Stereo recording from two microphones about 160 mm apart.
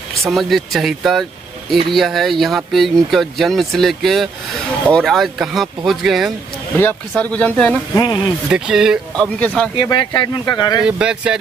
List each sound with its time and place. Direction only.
0.3 s speech: centre (ahead or behind)
6.8 s speech: 10° left (ahead or behind)
7.9 s speech: 25° left (ahead or behind)
8.5 s speech: 5° right (ahead or behind)
9.8 s speech: 30° left (ahead or behind)
10.8 s speech: 5° right (ahead or behind)